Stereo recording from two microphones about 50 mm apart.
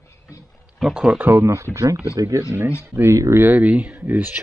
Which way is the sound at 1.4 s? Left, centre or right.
Right.